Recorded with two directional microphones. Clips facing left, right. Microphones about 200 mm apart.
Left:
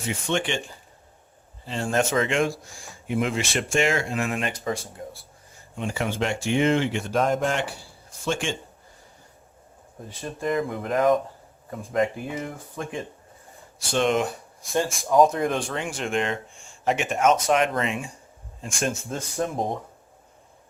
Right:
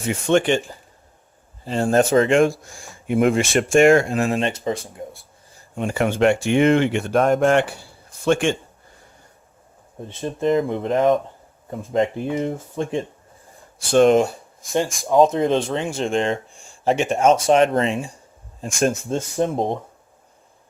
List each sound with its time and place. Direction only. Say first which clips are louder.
0.0 s speech: right 8 dB; 50° right (ahead or behind)
1.6 s speech: right 7 dB; 40° right (ahead or behind)
3.1 s speech: right 8 dB; 55° right (ahead or behind)
4.1 s speech: right 6 dB; 35° right (ahead or behind)
5.7 s speech: right 6 dB; 55° right (ahead or behind)
10.1 s speech: right 7 dB; 25° right (ahead or behind)
13.9 s speech: right 9 dB; 45° right (ahead or behind)
15.0 s speech: right 3 dB; 25° right (ahead or behind); by 18.9 s 40° right (ahead or behind)
19.1 s speech: right 6 dB; 25° right (ahead or behind)